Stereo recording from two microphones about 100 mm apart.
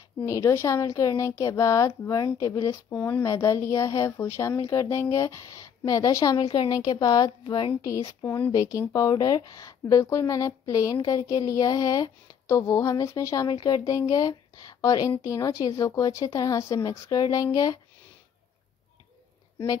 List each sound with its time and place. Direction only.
0.2 s speech: 30° left (ahead or behind)
2.9 s speech: 20° left (ahead or behind); by 7.7 s 50° left (ahead or behind)
7.8 s speech: 35° left (ahead or behind)
8.2 s speech: 20° left (ahead or behind)
8.5 s speech: 35° left (ahead or behind)
13.5 s speech: 45° left (ahead or behind)